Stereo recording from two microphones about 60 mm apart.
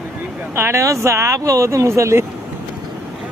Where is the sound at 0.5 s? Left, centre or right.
Right.